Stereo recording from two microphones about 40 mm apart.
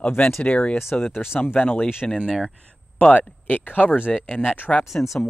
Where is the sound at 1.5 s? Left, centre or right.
Left.